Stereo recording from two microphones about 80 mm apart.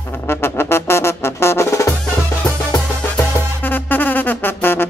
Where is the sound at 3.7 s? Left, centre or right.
Left.